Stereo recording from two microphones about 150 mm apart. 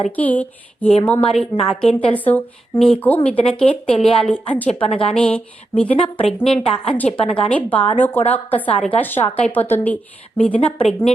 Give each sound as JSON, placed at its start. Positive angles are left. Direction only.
{"t": 0.2, "sound": "a woman's voice", "side_deg": 10}
{"t": 4.7, "sound": "a woman's voice", "side_deg": 40}
{"t": 5.1, "sound": "a woman's voice", "side_deg": 5}
{"t": 6.6, "sound": "a woman's voice", "side_deg": 40}
{"t": 6.9, "sound": "a woman's voice", "side_deg": 10}